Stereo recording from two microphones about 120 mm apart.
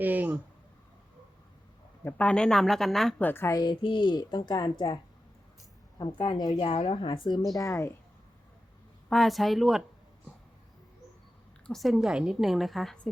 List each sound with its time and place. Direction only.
0.0 s speech: 15° right (ahead or behind)
2.0 s a woman's voice: 10° left (ahead or behind)
3.2 s a woman's voice: 15° left (ahead or behind)
3.5 s a woman's voice: 40° left (ahead or behind)
6.1 s a woman's voice: 35° left (ahead or behind)
6.6 s a woman's voice: 50° left (ahead or behind)
7.3 s a woman's voice: 35° left (ahead or behind)
9.0 s a woman's voice: centre (ahead or behind)
11.6 s a woman's voice: centre (ahead or behind)